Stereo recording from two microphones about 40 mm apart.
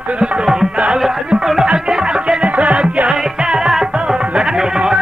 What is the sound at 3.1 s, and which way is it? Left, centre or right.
Music, centre.